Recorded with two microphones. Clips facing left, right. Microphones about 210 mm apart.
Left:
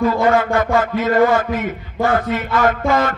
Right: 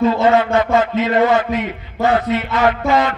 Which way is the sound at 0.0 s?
20° right (ahead or behind).